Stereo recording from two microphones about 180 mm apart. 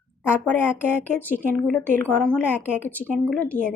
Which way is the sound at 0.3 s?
10° left (ahead or behind).